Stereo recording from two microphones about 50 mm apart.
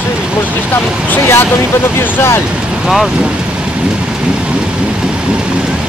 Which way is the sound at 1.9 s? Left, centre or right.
Left.